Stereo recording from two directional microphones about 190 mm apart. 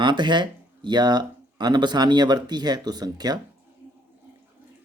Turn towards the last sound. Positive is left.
turn(degrees=-20)  # may be behind; listen again after turning